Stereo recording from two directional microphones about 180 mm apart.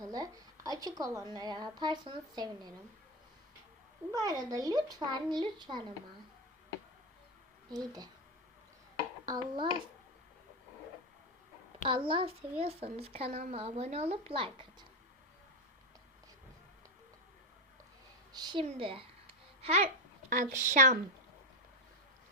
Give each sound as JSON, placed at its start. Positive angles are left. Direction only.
{"t": 0.0, "sound": "a sound", "side_deg": -20}
{"t": 1.3, "sound": "a woman's voice", "side_deg": -20}
{"t": 4.1, "sound": "a woman's voice", "side_deg": -20}
{"t": 7.7, "sound": "a woman's voice", "side_deg": -20}
{"t": 9.2, "sound": "a woman's voice", "side_deg": -20}
{"t": 11.8, "sound": "a woman's voice", "side_deg": -30}
{"t": 18.3, "sound": "a woman's voice", "side_deg": -25}
{"t": 18.6, "sound": "a sound", "side_deg": -30}
{"t": 20.3, "sound": "a woman's voice", "side_deg": -45}